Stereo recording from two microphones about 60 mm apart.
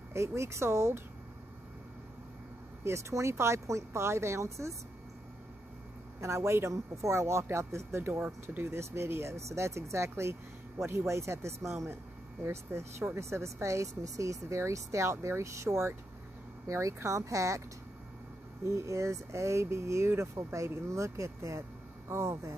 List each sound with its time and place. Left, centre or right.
0.1 s speech: right
2.8 s speech: right
6.2 s speech: right
16.6 s speech: right